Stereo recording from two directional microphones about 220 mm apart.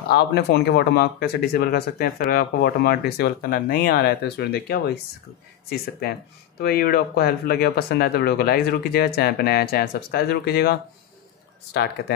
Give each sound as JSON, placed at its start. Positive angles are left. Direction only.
{"t": 0.1, "sound": "speech", "side_deg": 50}